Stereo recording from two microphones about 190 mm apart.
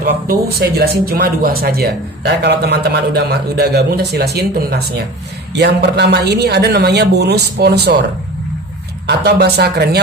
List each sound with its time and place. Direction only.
0.0 s speech: 55° right (ahead or behind)
9.0 s speech: 60° right (ahead or behind)